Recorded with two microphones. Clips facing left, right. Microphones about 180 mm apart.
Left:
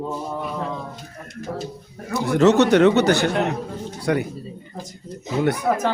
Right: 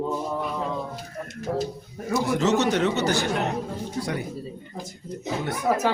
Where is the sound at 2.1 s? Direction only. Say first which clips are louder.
Left 6 dB; 65° left (ahead or behind).